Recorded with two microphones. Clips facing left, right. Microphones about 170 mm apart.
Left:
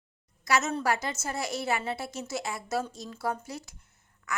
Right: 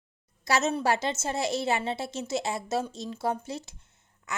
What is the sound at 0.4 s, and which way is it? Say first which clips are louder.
A woman's voice: right 2 dB; 30° right (ahead or behind).